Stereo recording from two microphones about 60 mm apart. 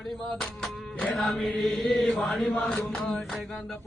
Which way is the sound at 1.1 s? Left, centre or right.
Centre.